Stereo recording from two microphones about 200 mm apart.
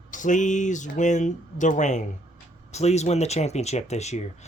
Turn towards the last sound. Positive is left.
turn(degrees=35)  # may be behind; listen again after turning